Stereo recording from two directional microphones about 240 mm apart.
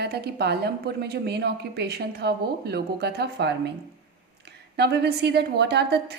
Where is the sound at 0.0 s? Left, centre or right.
Right.